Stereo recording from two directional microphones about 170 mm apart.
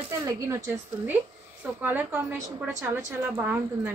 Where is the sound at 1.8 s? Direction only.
10° right (ahead or behind).